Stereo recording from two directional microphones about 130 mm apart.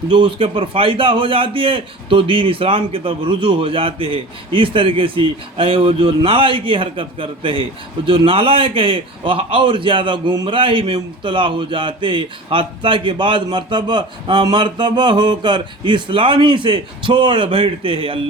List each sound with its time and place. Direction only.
0.1 s a man's voice: 40° right (ahead or behind)